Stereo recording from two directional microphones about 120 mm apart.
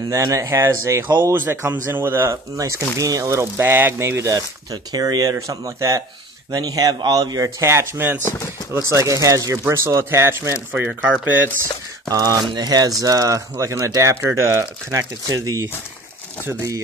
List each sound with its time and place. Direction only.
0.1 s speech: 30° right (ahead or behind)
8.2 s speech: 20° left (ahead or behind)
8.7 s speech: 25° right (ahead or behind)
10.7 s speech: 10° right (ahead or behind)
12.1 s speech: 30° right (ahead or behind)